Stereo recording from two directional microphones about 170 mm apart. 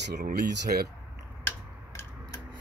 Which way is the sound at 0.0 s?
75° right (ahead or behind).